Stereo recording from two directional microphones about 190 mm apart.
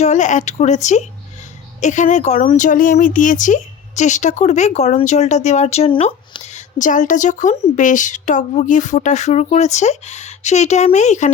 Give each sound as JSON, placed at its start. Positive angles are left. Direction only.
{"t": 0.0, "sound": "speech", "side_deg": 40}